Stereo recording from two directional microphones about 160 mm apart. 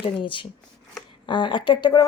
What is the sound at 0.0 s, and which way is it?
Speech, 30° left (ahead or behind).